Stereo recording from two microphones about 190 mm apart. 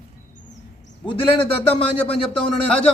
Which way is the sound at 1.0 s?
30° left (ahead or behind).